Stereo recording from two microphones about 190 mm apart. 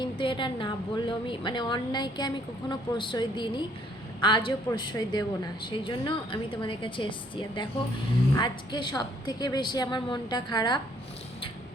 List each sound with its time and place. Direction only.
0.0 s a woman's voice: 25° left (ahead or behind)